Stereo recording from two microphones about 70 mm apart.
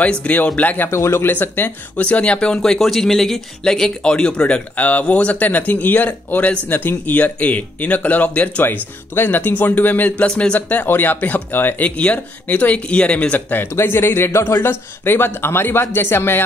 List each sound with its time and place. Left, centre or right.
0.0 s speech: centre
0.8 s a man's voice: left